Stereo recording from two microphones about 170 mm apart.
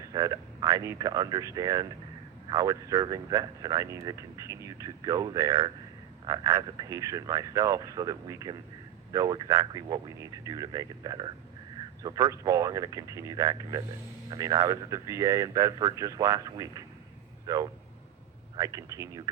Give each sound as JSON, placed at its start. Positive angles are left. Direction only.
{"t": 0.1, "sound": "speech", "side_deg": -20}